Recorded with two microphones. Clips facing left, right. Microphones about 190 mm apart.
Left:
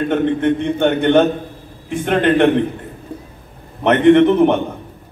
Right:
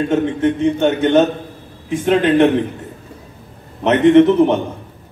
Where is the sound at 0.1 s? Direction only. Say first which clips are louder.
Even; 55° left (ahead or behind).